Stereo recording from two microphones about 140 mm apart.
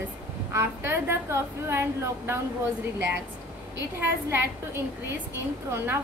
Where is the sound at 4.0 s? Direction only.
15° right (ahead or behind).